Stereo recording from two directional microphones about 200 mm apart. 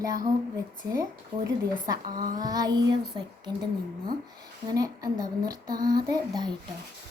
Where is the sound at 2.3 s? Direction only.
20° right (ahead or behind).